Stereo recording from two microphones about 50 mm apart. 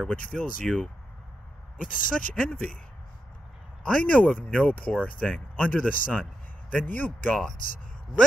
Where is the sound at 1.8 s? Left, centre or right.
Left.